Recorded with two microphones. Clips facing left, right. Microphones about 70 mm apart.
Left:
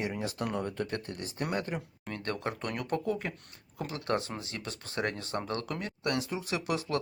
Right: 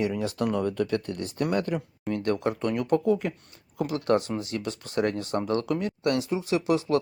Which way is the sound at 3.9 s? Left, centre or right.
Left.